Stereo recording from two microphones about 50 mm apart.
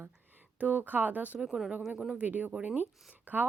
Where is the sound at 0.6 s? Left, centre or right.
Right.